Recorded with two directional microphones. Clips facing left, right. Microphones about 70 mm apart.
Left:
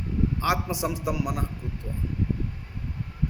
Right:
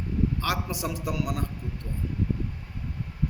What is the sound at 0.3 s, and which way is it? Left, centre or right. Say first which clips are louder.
A man's voice: left 3 dB; centre.